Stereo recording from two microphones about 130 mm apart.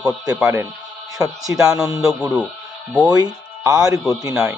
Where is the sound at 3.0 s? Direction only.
30° right (ahead or behind).